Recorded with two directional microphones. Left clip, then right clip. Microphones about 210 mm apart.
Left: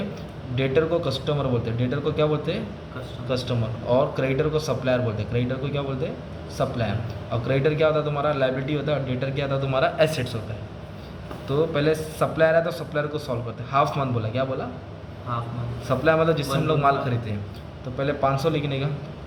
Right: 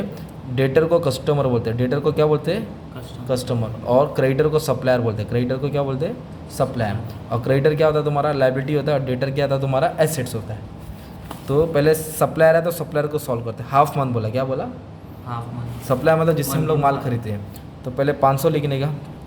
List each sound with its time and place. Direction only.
0.5 s a man's voice: 45° right (ahead or behind)
11.4 s a man's voice: 45° right (ahead or behind)
15.9 s a man's voice: 45° right (ahead or behind)